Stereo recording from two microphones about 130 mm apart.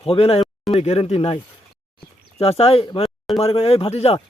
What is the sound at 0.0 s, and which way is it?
Speech, 50° left (ahead or behind).